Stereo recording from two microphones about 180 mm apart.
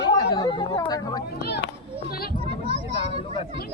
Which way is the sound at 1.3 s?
65° left (ahead or behind).